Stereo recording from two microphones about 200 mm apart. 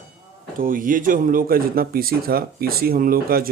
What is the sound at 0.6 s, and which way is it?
Speech, 45° right (ahead or behind).